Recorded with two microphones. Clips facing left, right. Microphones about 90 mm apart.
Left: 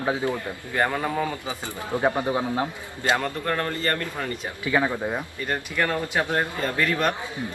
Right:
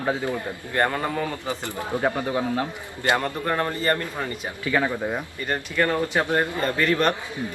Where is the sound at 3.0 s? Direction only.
15° right (ahead or behind).